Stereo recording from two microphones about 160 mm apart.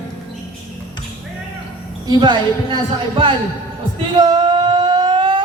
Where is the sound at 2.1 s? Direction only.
30° right (ahead or behind).